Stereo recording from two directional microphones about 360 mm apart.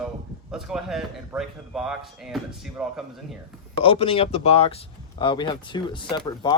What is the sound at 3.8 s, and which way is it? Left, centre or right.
Speech, centre.